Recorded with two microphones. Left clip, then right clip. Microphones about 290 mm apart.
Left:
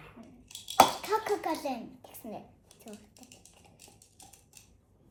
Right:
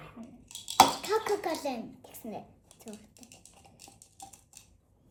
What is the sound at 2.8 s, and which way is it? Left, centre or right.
Typing, centre.